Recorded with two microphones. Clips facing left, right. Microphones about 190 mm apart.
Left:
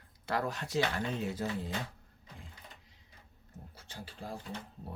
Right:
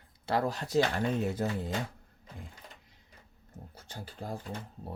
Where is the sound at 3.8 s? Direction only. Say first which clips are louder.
Right 3 dB; 45° right (ahead or behind).